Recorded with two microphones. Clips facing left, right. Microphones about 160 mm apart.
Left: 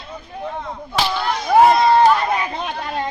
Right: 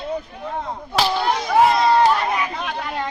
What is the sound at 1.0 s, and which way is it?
Speech, 35° right (ahead or behind).